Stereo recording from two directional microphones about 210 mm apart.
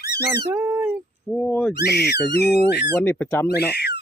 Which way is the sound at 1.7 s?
50° left (ahead or behind).